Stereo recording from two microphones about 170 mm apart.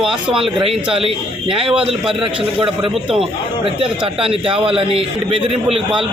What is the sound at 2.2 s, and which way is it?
A man's voice, 30° right (ahead or behind).